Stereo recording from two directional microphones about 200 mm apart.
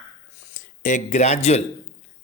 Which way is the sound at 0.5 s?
40° left (ahead or behind).